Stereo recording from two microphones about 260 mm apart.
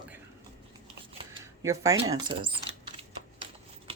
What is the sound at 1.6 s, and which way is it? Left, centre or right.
Speech, centre.